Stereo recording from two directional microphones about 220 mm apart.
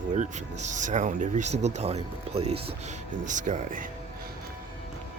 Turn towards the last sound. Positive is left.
turn(degrees=-35)  # may be behind; listen again after turning